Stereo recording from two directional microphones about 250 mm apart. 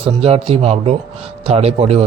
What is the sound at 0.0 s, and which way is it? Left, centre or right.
A man's voice, right.